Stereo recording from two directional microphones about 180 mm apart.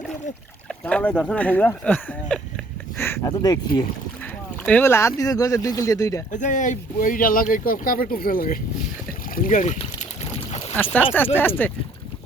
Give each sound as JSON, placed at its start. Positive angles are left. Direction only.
{"t": 0.7, "sound": "speech", "side_deg": 5}
{"t": 4.6, "sound": "speech", "side_deg": 10}
{"t": 6.3, "sound": "speech", "side_deg": 45}
{"t": 10.9, "sound": "speech", "side_deg": 10}